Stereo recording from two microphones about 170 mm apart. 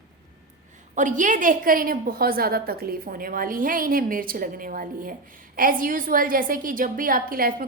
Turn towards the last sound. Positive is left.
turn(degrees=-55)  # may be behind; listen again after turning